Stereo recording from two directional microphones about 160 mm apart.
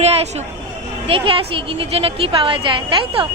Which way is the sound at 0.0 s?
40° right (ahead or behind).